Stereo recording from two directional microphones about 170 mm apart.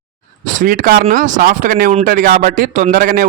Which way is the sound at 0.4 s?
50° right (ahead or behind).